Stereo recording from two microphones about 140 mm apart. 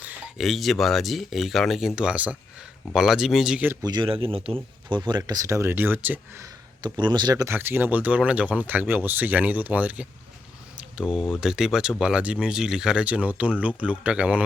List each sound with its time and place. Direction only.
0.3 s speech: centre (ahead or behind)
3.8 s speech: 35° right (ahead or behind); by 6.5 s 15° right (ahead or behind)
6.8 s speech: 35° right (ahead or behind)
7.5 s speech: 15° right (ahead or behind)
10.8 s a sound: 5° right (ahead or behind)
11.3 s speech: 5° right (ahead or behind)